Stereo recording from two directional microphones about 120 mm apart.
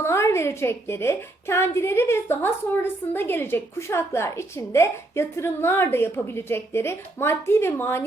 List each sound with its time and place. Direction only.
0.0 s a woman's voice: 25° left (ahead or behind)